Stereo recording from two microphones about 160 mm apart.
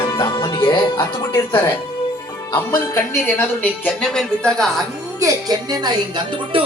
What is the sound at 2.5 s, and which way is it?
Speech, 15° left (ahead or behind).